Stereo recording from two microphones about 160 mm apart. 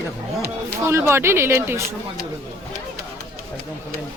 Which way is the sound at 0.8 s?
15° right (ahead or behind).